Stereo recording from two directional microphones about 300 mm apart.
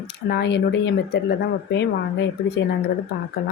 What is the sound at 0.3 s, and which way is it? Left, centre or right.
Speech, left.